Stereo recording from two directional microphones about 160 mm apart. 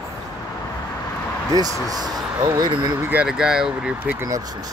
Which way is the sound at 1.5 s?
25° right (ahead or behind).